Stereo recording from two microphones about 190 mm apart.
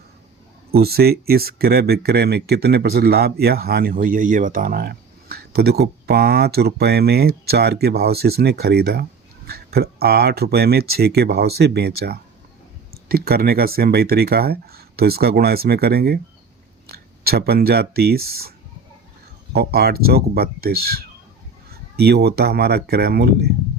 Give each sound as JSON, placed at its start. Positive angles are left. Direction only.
{"t": 0.7, "sound": "speech", "side_deg": -55}
{"t": 19.5, "sound": "speech", "side_deg": -55}